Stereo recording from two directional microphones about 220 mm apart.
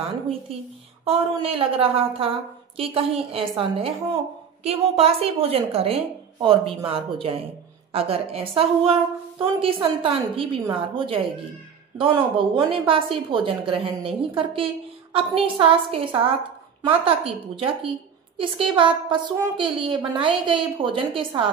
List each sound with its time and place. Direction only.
1.0 s a woman's voice: 25° right (ahead or behind)